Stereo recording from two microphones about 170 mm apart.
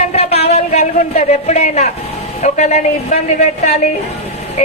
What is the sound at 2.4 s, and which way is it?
A woman's voice, 40° left (ahead or behind).